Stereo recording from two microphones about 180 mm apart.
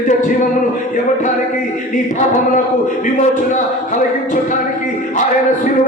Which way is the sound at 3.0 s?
45° left (ahead or behind).